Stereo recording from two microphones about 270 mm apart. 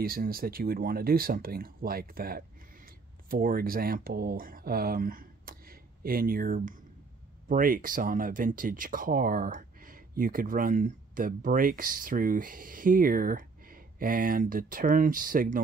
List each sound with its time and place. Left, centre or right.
0.0 s speech: right